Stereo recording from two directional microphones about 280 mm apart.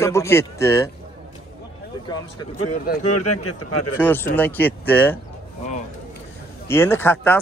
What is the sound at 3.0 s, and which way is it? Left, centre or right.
Speech, left.